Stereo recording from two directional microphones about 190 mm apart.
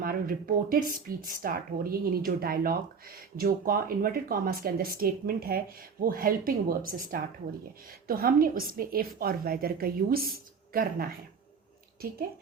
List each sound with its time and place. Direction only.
0.0 s speech: 50° right (ahead or behind)